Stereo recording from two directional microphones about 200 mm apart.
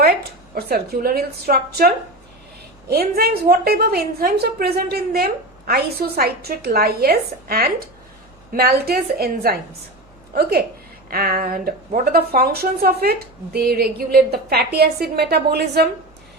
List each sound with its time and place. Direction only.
0.0 s a woman's voice: 50° right (ahead or behind)
2.9 s a woman's voice: 50° right (ahead or behind)
11.1 s a woman's voice: 45° right (ahead or behind)